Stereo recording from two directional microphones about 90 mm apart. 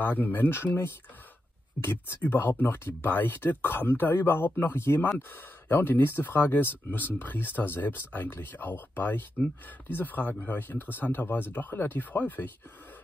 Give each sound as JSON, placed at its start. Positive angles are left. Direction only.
{"t": 0.0, "sound": "speech", "side_deg": 20}